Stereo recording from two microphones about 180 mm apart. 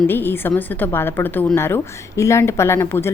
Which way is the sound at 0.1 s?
10° left (ahead or behind).